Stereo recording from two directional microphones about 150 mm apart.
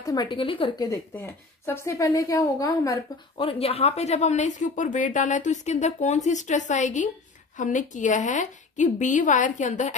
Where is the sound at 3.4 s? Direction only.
40° left (ahead or behind).